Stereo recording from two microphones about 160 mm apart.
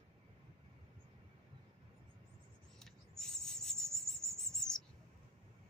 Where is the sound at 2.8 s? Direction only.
5° left (ahead or behind).